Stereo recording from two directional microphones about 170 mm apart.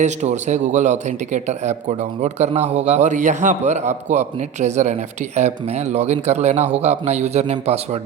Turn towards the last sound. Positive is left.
turn(degrees=-40)  # may be behind; listen again after turning